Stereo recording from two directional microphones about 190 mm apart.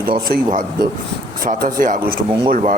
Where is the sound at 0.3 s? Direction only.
50° right (ahead or behind).